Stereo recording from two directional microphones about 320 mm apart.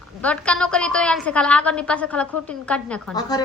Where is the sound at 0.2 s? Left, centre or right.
Centre.